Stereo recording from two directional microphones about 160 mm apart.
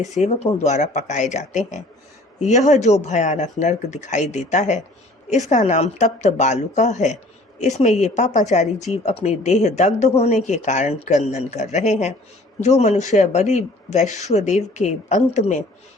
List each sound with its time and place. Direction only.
0.2 s speech: 45° left (ahead or behind)